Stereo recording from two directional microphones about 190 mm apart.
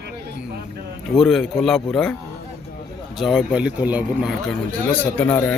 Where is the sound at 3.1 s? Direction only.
Centre (ahead or behind).